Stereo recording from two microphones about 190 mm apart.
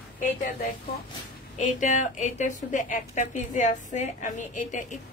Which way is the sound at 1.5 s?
40° left (ahead or behind).